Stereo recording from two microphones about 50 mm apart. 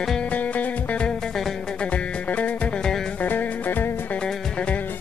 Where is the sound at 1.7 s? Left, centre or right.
Left.